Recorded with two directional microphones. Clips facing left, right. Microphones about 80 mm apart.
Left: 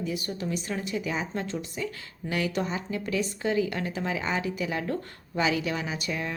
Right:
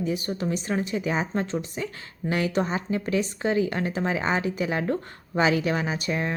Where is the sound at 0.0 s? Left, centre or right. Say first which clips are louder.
Right 4 dB; right.